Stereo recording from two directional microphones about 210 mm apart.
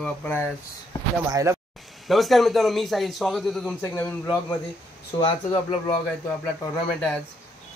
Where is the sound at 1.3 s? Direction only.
15° right (ahead or behind).